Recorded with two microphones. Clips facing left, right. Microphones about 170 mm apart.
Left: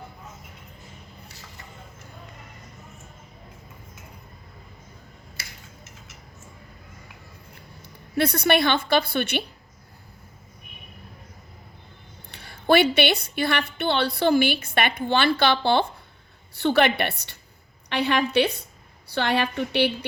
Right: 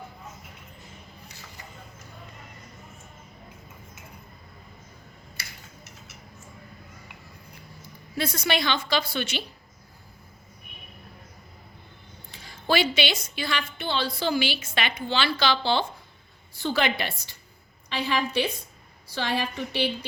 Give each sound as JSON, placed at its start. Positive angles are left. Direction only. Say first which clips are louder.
{"t": 8.1, "sound": "a woman's voice", "louder": "left 6 dB", "side_deg": 65}
{"t": 12.3, "sound": "a woman's voice", "louder": "left 6 dB", "side_deg": 60}